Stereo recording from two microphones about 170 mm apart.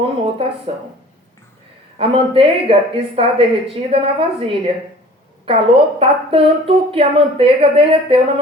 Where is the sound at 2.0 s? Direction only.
35° right (ahead or behind).